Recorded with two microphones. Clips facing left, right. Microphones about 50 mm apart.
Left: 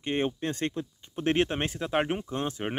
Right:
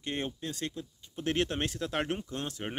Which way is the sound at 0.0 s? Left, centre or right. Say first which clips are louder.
Left 7 dB; left.